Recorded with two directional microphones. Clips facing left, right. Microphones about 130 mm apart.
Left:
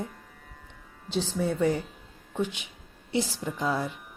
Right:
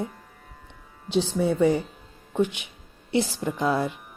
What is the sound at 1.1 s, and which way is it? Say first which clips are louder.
Speech: right 5 dB; 70° right (ahead or behind).